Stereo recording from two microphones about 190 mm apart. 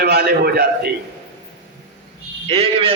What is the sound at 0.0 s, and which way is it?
Speech, 60° right (ahead or behind).